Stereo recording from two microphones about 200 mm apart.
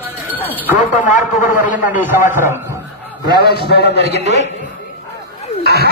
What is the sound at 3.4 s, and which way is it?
Speech, 55° left (ahead or behind).